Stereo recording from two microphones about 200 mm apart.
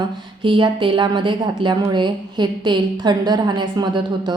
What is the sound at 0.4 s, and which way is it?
A woman's voice, 25° right (ahead or behind).